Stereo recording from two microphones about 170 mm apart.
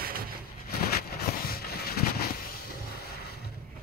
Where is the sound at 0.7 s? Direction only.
65° left (ahead or behind).